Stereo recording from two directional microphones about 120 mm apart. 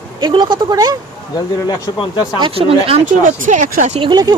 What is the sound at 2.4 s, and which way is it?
Speech, 50° right (ahead or behind).